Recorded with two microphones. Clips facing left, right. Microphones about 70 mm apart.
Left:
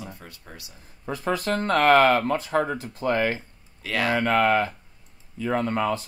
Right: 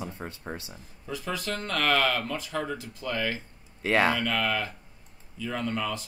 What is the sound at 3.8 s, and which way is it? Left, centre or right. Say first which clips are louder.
Speech: right 3 dB; right.